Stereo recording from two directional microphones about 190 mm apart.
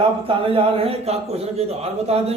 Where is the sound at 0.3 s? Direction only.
30° right (ahead or behind).